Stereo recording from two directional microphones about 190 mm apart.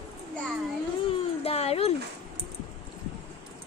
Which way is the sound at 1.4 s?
30° left (ahead or behind).